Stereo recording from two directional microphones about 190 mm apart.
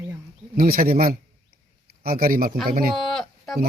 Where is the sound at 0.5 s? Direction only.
50° right (ahead or behind).